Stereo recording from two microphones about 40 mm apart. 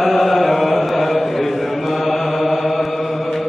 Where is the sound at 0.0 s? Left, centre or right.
Centre.